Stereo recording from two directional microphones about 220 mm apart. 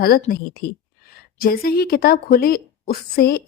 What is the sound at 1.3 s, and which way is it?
Speech, 40° left (ahead or behind).